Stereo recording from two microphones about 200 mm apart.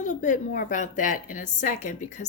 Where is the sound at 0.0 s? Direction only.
40° left (ahead or behind).